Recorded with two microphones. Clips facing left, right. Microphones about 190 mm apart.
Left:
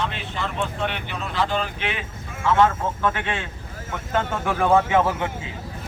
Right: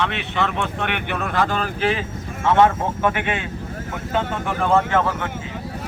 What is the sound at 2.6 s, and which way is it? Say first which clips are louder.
Speech: right 3 dB; 20° right (ahead or behind).